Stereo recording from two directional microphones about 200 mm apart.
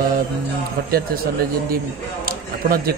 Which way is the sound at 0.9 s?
45° right (ahead or behind).